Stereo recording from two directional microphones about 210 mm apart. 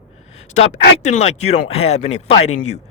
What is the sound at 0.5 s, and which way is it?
Speech, 30° left (ahead or behind).